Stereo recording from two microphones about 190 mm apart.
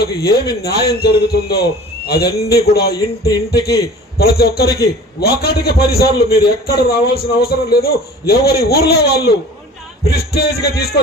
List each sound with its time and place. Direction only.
0.0 s a man's voice: 55° left (ahead or behind)